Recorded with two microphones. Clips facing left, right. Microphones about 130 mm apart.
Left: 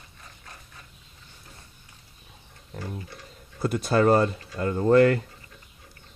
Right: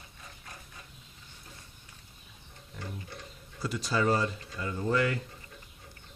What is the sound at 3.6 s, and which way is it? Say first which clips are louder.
Speech: left 8 dB; 55° left (ahead or behind).